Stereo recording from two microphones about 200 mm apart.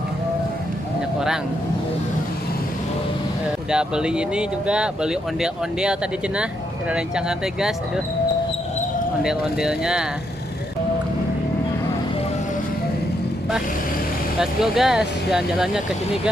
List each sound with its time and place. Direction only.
3.7 s speech: 5° right (ahead or behind)
9.2 s speech: 5° right (ahead or behind)
14.4 s speech: centre (ahead or behind)